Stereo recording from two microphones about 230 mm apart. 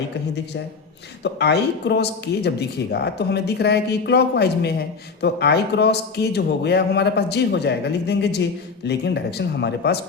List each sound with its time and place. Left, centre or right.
1.2 s speech: left